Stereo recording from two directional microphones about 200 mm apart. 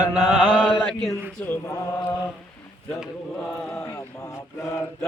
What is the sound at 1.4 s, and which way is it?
Mantra, 10° left (ahead or behind).